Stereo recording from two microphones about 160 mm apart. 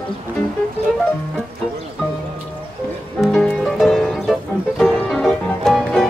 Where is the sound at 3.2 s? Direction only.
5° left (ahead or behind).